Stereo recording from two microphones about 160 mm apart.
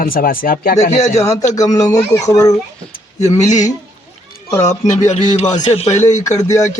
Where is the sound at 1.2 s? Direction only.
20° left (ahead or behind).